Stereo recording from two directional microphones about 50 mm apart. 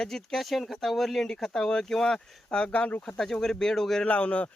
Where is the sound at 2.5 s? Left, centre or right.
Left.